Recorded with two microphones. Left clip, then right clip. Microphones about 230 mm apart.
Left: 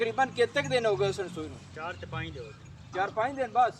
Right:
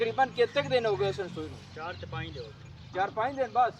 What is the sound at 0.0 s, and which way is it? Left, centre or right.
Speech, left.